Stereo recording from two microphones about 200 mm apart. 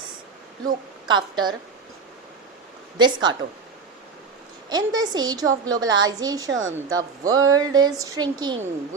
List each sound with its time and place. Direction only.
1.0 s a woman's voice: 20° right (ahead or behind)
3.0 s a woman's voice: 20° right (ahead or behind)
4.7 s a woman's voice: 20° right (ahead or behind)
6.5 s a woman's voice: 75° right (ahead or behind)
6.7 s a woman's voice: 15° right (ahead or behind)